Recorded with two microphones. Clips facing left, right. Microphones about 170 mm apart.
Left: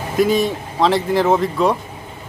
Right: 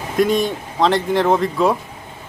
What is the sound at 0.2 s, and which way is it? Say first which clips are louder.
A man's voice: left 1 dB; centre (ahead or behind).